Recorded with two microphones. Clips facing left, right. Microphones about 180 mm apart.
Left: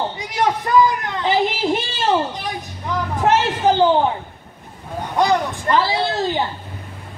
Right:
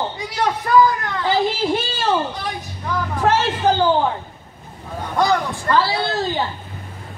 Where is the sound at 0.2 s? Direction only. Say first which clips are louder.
Left 3 dB; 20° left (ahead or behind).